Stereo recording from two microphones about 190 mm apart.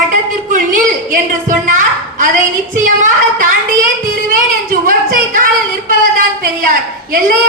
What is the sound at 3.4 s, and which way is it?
Speech, 50° right (ahead or behind).